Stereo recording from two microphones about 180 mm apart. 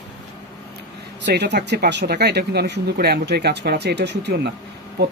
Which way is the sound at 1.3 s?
65° right (ahead or behind).